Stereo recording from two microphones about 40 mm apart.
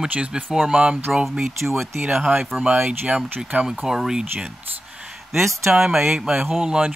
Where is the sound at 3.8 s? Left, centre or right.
Centre.